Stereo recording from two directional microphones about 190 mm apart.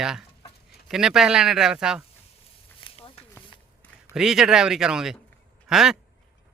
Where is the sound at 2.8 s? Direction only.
25° left (ahead or behind).